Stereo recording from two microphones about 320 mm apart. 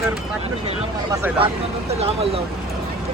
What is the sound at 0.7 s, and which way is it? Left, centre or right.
Speech, centre.